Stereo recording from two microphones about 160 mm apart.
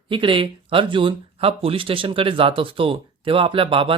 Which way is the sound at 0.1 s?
30° right (ahead or behind).